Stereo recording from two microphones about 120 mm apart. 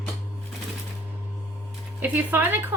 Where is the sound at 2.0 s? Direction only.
15° right (ahead or behind).